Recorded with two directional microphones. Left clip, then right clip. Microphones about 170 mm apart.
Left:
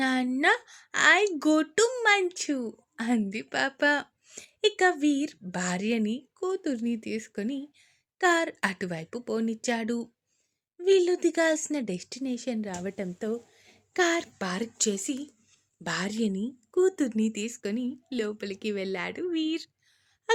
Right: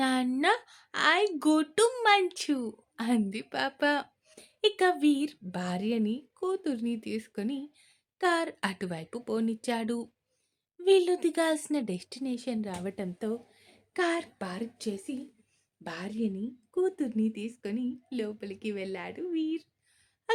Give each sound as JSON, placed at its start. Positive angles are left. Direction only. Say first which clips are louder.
{"t": 0.0, "sound": "speech", "louder": "left 2 dB", "side_deg": 5}
{"t": 14.6, "sound": "a woman's voice", "louder": "left 7 dB", "side_deg": 45}